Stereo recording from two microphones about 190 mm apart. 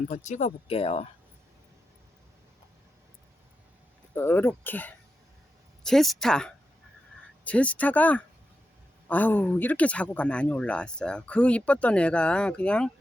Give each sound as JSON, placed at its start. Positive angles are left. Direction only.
{"t": 0.1, "sound": "speech", "side_deg": 40}
{"t": 4.1, "sound": "speech", "side_deg": 10}